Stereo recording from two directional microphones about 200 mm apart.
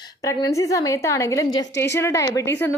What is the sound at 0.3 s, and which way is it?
A woman's voice, 15° left (ahead or behind).